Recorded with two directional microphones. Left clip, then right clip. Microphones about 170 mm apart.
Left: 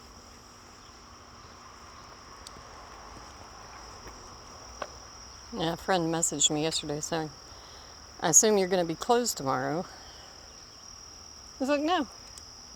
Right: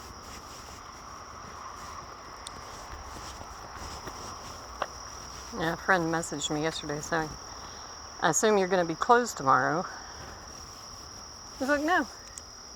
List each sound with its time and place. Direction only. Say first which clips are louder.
5.5 s speech: right 2 dB; 35° left (ahead or behind)
11.6 s speech: right 1 dB; 35° left (ahead or behind)